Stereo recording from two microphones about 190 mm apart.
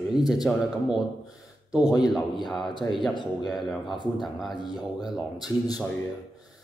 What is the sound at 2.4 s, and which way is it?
Speech, centre (ahead or behind).